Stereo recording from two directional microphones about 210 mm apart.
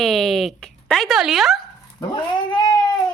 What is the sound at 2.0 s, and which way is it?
Dog, 20° left (ahead or behind).